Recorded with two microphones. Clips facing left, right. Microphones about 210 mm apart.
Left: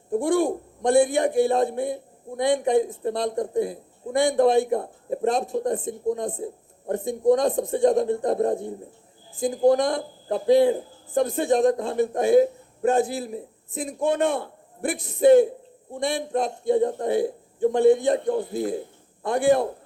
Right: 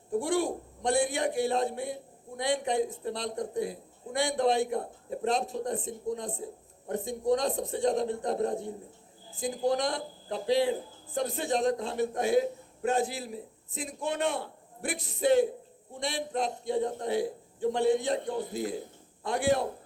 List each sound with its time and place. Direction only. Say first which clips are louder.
0.2 s a man's voice: left 7 dB; 50° left (ahead or behind)